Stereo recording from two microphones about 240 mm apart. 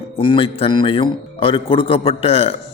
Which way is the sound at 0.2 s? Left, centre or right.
Left.